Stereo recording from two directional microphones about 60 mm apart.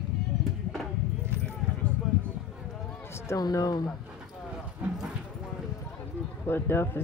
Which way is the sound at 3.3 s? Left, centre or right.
Left.